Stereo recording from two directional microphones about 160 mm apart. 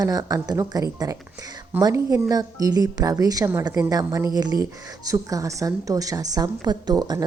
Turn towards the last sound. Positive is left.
turn(degrees=-25)  # may be behind; listen again after turning